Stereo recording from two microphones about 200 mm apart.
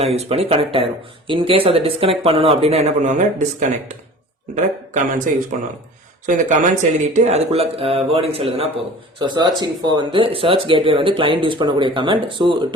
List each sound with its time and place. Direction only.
0.0 s speech: 30° right (ahead or behind)
4.5 s speech: 35° right (ahead or behind)